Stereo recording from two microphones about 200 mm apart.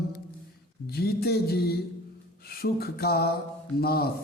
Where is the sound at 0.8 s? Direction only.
50° left (ahead or behind).